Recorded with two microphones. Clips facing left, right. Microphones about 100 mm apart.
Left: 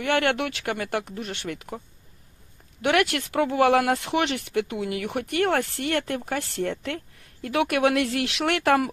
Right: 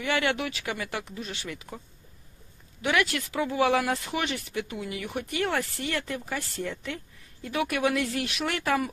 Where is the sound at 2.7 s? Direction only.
65° left (ahead or behind).